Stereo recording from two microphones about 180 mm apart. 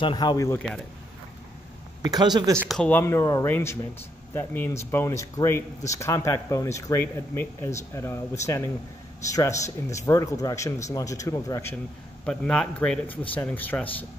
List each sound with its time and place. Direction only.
0.0 s speech: 25° left (ahead or behind)
2.0 s speech: 20° right (ahead or behind)
2.7 s speech: 5° left (ahead or behind)
12.3 s speech: 5° left (ahead or behind)